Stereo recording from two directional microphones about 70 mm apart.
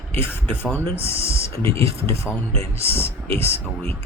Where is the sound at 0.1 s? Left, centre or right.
Left.